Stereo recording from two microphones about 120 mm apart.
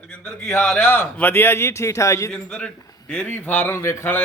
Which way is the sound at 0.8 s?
15° left (ahead or behind).